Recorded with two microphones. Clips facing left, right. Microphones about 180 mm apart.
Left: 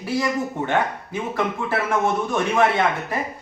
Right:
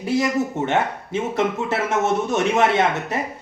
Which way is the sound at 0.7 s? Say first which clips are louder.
Right 1 dB; 25° right (ahead or behind).